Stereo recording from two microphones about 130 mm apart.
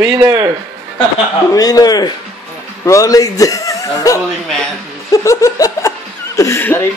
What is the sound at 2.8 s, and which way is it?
Speech, 25° left (ahead or behind).